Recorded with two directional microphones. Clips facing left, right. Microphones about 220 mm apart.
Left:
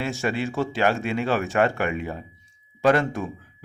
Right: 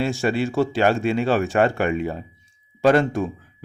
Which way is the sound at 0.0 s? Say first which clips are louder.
Right 4 dB; 30° right (ahead or behind).